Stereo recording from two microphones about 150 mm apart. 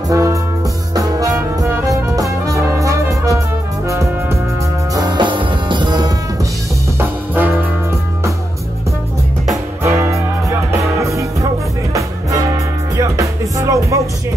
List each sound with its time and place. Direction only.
0.1 s music: 20° right (ahead or behind)
7.0 s music: 10° right (ahead or behind)
9.8 s music: 15° right (ahead or behind)
12.9 s music: 20° right (ahead or behind)